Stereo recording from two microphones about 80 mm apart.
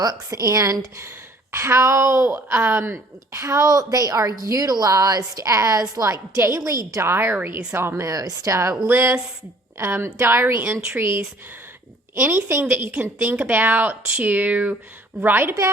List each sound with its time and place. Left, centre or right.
0.0 s a woman's voice: right
6.9 s a woman's voice: right
8.9 s a woman's voice: right
13.0 s speech: right